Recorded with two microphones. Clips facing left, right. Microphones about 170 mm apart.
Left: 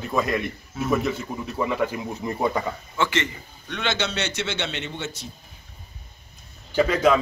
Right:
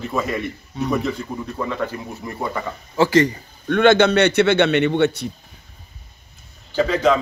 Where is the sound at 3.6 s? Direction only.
50° right (ahead or behind).